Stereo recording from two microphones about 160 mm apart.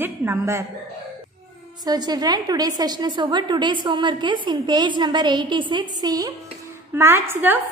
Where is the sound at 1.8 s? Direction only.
25° right (ahead or behind).